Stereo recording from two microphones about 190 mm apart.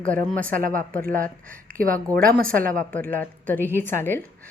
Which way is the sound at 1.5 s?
45° right (ahead or behind).